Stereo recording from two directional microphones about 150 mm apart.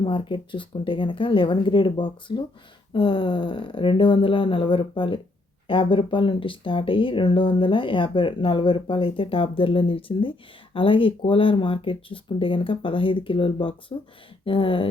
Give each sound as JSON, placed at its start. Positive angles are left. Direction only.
{"t": 0.0, "sound": "speech", "side_deg": 35}